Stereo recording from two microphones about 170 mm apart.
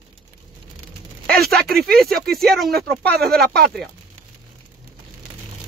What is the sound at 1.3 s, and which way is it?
Speech, 65° right (ahead or behind).